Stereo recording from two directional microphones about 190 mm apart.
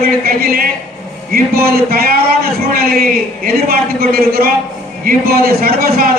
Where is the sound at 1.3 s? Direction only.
55° right (ahead or behind).